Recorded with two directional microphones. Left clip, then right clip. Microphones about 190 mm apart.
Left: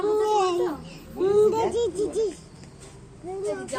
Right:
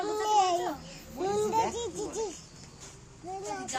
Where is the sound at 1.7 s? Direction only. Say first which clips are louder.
Left 10 dB; 10° right (ahead or behind).